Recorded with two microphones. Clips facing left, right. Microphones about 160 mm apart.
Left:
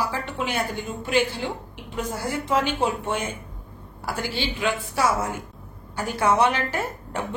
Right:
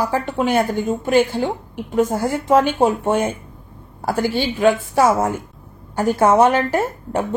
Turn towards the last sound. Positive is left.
turn(degrees=-45)  # may be behind; listen again after turning